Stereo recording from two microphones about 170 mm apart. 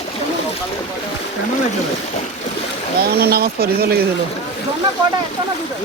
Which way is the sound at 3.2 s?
65° right (ahead or behind).